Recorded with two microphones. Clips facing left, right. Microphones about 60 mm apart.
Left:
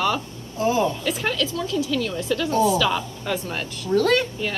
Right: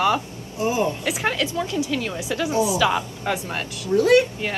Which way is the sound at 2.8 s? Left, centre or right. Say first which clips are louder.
Right 2 dB; right.